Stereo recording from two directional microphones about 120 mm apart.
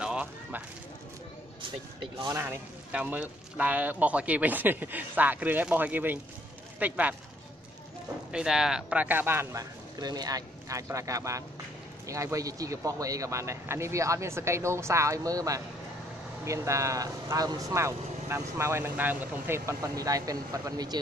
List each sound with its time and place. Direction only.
0.0 s a sound: 10° right (ahead or behind)
2.0 s speech: 45° right (ahead or behind)
2.3 s speech: 20° right (ahead or behind)
2.9 s speech: 10° right (ahead or behind)
8.3 s speech: 5° right (ahead or behind); by 21.0 s 35° right (ahead or behind)